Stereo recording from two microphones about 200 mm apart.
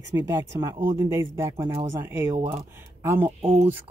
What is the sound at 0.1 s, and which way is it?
Speech, 15° right (ahead or behind).